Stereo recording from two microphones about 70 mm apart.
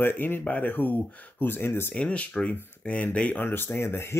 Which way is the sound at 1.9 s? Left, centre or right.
Centre.